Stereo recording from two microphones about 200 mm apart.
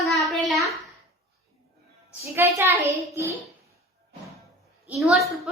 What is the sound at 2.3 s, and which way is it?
Speech, 15° right (ahead or behind).